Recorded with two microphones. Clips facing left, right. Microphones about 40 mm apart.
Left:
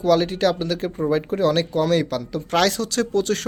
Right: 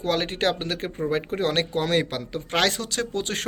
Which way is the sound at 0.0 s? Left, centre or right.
Right.